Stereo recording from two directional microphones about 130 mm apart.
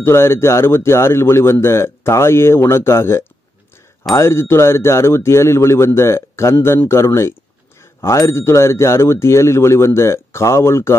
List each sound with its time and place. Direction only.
0.0 s speech: 20° left (ahead or behind)